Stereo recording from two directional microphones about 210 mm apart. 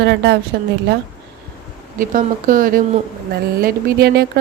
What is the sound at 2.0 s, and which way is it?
Speech, 40° right (ahead or behind).